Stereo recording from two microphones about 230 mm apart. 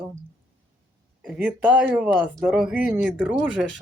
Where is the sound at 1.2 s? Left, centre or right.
Centre.